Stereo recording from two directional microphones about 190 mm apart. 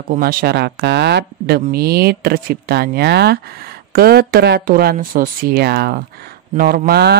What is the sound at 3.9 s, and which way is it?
Speech, 55° right (ahead or behind).